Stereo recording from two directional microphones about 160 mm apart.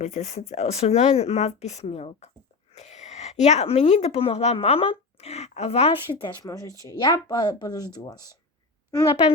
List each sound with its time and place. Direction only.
0.0 s speech: 45° left (ahead or behind); by 8.4 s 25° left (ahead or behind)